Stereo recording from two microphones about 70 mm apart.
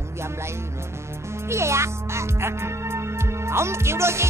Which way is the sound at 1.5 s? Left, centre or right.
Right.